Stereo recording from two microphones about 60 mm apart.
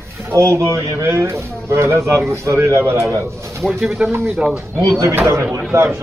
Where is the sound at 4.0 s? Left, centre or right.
Right.